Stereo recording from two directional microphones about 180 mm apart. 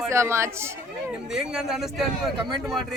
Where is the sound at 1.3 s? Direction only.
5° right (ahead or behind).